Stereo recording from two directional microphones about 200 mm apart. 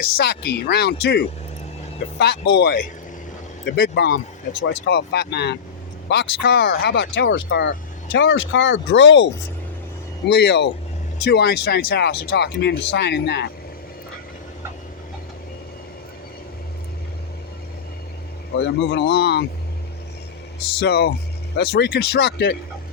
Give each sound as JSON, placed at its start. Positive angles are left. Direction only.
{"t": 0.3, "sound": "speech", "side_deg": 55}
{"t": 18.5, "sound": "speech", "side_deg": 60}
{"t": 20.8, "sound": "speech", "side_deg": 55}